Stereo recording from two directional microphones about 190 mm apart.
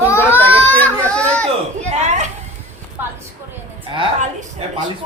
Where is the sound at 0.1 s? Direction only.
10° left (ahead or behind).